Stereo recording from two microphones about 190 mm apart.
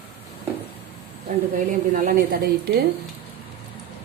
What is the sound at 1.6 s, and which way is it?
Speech, 45° right (ahead or behind).